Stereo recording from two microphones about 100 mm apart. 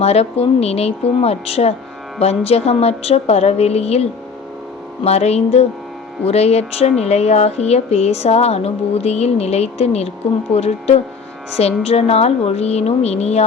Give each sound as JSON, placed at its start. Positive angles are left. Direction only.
{"t": 0.0, "sound": "speech", "side_deg": 90}